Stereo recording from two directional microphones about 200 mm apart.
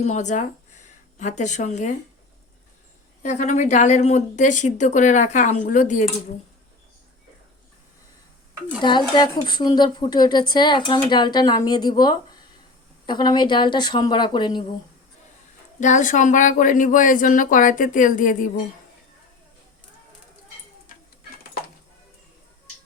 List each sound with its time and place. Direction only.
0.0 s a woman's voice: 35° left (ahead or behind)
3.2 s a woman's voice: 35° left (ahead or behind)
8.8 s speech: 20° left (ahead or behind)
15.8 s a woman's voice: 40° left (ahead or behind)